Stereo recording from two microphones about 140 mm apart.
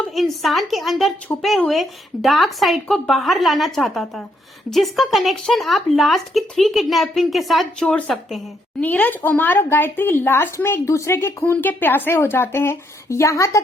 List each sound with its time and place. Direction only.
0.1 s speech: centre (ahead or behind); by 13.6 s 20° left (ahead or behind)